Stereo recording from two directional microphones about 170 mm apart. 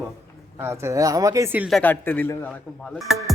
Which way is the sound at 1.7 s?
10° left (ahead or behind).